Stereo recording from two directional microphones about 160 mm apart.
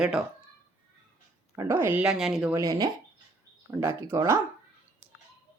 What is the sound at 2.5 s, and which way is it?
Speech, 20° right (ahead or behind).